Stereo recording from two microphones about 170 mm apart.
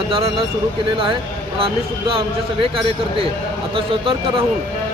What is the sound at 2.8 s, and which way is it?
A man's voice, 30° right (ahead or behind).